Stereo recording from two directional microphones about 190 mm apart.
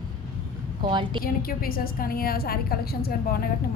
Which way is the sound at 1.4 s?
50° left (ahead or behind).